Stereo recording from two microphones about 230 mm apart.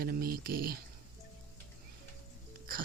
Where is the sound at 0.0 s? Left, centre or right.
Right.